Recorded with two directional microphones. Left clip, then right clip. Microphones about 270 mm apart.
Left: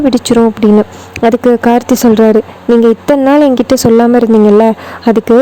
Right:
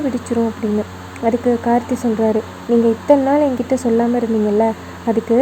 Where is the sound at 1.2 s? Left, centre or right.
Left.